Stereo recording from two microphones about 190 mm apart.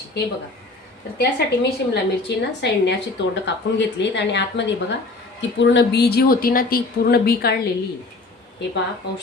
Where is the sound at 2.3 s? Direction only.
65° left (ahead or behind).